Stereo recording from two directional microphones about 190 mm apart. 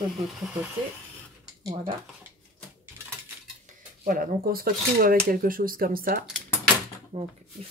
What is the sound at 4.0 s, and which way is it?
Speech, 45° right (ahead or behind).